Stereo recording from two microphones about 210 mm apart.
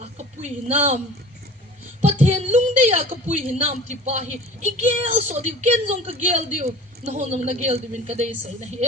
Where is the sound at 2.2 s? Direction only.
35° right (ahead or behind).